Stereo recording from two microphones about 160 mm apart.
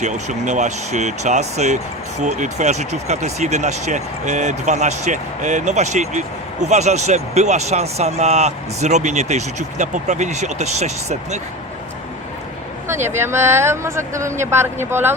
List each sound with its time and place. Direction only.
0.0 s speech: 50° right (ahead or behind)
13.1 s speech: 15° right (ahead or behind)